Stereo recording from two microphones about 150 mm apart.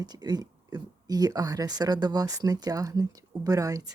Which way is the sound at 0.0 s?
25° right (ahead or behind).